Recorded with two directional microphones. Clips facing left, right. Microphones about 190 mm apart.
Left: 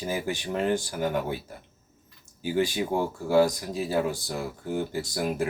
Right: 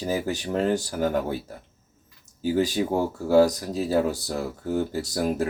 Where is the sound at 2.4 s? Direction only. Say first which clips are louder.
Right 3 dB; 40° right (ahead or behind).